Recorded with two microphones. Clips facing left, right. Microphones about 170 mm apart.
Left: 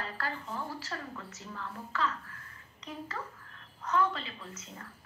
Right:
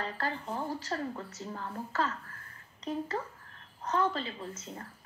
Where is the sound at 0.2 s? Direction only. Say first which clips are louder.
Right 2 dB; 40° right (ahead or behind).